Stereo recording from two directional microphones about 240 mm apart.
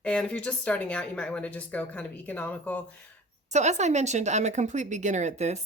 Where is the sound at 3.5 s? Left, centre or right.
Right.